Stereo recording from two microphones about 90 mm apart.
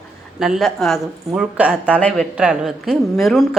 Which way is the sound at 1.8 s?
15° left (ahead or behind).